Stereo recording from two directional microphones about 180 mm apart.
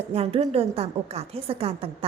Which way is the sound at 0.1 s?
35° right (ahead or behind).